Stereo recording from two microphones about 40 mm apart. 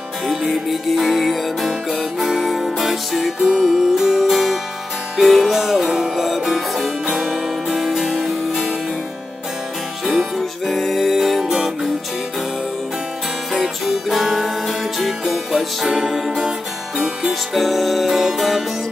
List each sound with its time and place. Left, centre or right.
0.3 s music: centre
5.9 s music: centre
10.0 s music: centre
11.4 s music: centre
13.5 s music: centre